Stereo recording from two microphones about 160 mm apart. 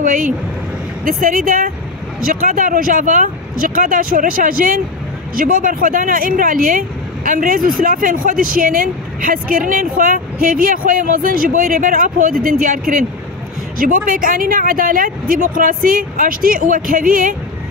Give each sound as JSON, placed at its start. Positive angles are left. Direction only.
{"t": 0.0, "sound": "vehicle", "side_deg": -60}
{"t": 1.0, "sound": "speech", "side_deg": -60}